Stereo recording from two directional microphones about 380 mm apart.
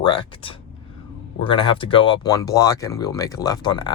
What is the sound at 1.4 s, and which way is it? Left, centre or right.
Speech, centre.